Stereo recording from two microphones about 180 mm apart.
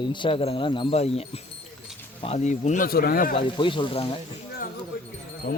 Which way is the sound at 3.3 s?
25° left (ahead or behind).